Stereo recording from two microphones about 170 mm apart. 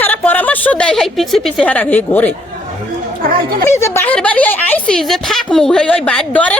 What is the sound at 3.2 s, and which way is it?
Speech, 55° right (ahead or behind).